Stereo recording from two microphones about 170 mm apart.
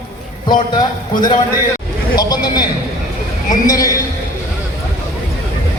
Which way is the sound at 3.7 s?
20° left (ahead or behind).